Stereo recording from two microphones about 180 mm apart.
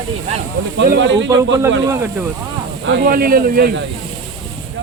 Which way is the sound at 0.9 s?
80° right.